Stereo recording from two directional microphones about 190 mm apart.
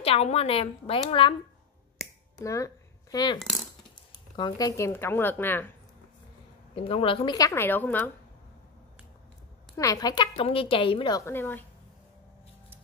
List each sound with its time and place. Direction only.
0.0 s a woman's voice: 30° left (ahead or behind)
2.3 s a sound: 15° left (ahead or behind)
3.3 s coin: centre (ahead or behind)
4.4 s speech: 20° left (ahead or behind)
6.7 s a woman's voice: 30° left (ahead or behind); by 8.0 s 10° left (ahead or behind)
9.8 s a woman's voice: 20° left (ahead or behind)